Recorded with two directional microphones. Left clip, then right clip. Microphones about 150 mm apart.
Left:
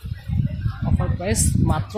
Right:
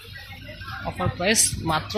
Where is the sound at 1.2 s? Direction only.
15° left (ahead or behind).